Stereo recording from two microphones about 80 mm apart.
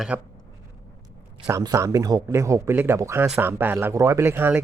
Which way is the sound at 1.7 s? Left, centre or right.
Right.